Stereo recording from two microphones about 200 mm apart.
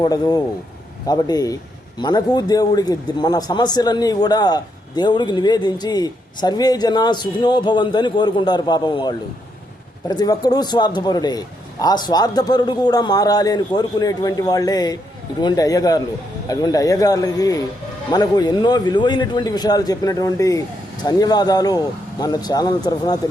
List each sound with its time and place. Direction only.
0.0 s speech: 20° left (ahead or behind)